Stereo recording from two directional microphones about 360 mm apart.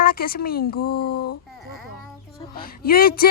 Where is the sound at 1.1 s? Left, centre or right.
Left.